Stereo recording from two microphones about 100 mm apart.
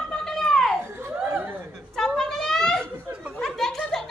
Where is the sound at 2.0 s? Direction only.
5° left (ahead or behind).